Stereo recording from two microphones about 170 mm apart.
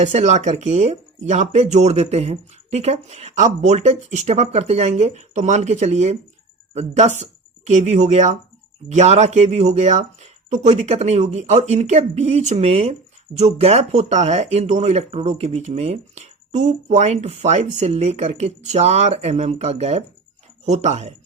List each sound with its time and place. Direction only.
0.0 s speech: 40° right (ahead or behind)